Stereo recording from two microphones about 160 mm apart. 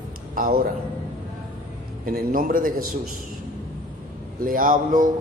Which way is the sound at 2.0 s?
60° right (ahead or behind).